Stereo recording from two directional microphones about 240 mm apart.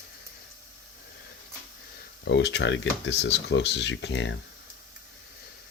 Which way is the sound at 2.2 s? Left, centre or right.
Left.